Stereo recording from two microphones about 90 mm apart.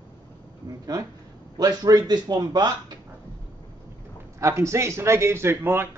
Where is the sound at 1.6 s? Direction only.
45° right (ahead or behind).